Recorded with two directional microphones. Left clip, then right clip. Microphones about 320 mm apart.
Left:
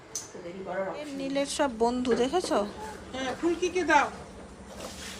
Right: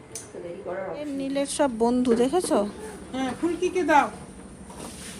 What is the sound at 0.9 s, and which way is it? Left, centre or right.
A woman's voice, centre.